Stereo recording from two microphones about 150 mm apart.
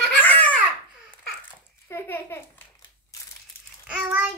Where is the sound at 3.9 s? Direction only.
10° right (ahead or behind).